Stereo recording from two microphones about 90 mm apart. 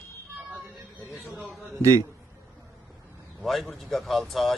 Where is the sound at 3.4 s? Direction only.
Centre (ahead or behind).